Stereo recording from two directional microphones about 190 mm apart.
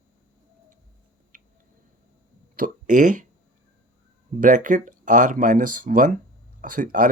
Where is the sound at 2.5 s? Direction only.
45° right (ahead or behind).